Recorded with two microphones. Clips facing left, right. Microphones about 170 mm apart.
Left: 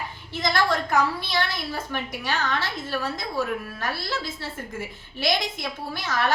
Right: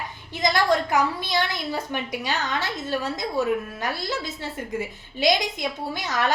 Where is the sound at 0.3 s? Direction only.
15° right (ahead or behind).